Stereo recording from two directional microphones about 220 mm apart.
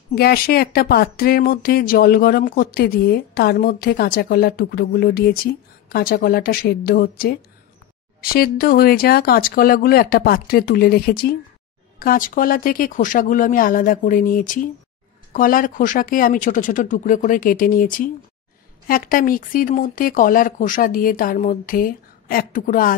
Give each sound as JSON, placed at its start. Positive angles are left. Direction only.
{"t": 0.1, "sound": "speech", "side_deg": 45}